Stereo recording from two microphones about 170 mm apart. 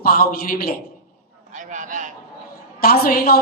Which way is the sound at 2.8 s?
60° left (ahead or behind).